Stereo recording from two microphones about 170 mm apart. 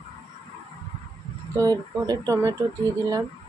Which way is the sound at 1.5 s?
20° right (ahead or behind).